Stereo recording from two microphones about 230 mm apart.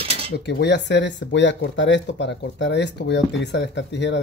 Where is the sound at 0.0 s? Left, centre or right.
Right.